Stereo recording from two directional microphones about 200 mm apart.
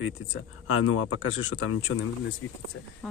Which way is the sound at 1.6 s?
75° left (ahead or behind).